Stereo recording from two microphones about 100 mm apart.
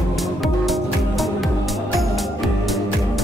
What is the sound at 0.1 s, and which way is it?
Music, centre (ahead or behind).